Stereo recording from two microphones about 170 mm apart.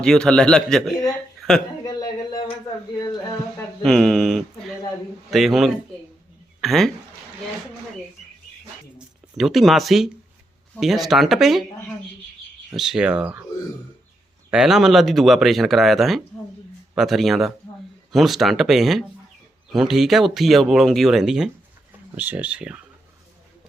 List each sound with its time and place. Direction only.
0.0 s speech: 5° left (ahead or behind)
1.4 s a sound: centre (ahead or behind)
1.8 s a sound: 20° left (ahead or behind)
3.0 s speech: 25° left (ahead or behind)
3.8 s speech: centre (ahead or behind)
9.0 s speech: centre (ahead or behind)
12.7 s speech: 5° right (ahead or behind)
14.5 s speech: 5° right (ahead or behind)